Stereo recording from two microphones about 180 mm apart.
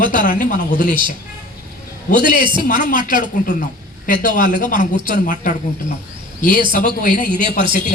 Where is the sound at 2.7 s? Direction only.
50° left (ahead or behind).